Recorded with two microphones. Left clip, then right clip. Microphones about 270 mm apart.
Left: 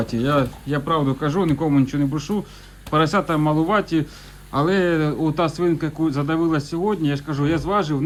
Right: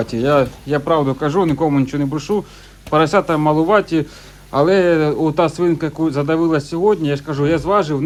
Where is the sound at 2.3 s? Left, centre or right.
Right.